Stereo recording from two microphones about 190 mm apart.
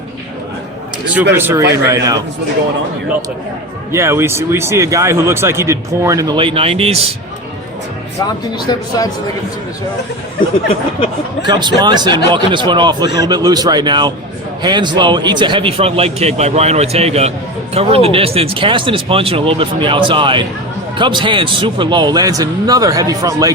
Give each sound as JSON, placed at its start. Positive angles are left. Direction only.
{"t": 1.3, "sound": "a man's voice", "side_deg": -10}
{"t": 3.9, "sound": "a man's voice", "side_deg": -15}
{"t": 8.2, "sound": "speech", "side_deg": 20}
{"t": 11.4, "sound": "a man's voice", "side_deg": -25}